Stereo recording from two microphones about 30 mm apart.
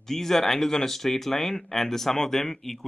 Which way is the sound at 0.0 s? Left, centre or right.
Centre.